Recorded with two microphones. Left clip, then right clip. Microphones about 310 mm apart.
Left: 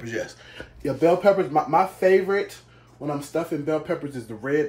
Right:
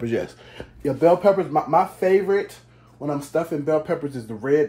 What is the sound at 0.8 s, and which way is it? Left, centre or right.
Speech, centre.